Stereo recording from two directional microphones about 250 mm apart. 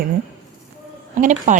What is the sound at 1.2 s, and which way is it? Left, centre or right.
Speech, right.